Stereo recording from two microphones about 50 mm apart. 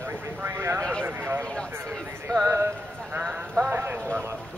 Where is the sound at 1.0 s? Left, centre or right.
Right.